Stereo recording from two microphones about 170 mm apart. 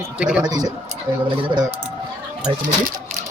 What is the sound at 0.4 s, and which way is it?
Speech, 25° right (ahead or behind).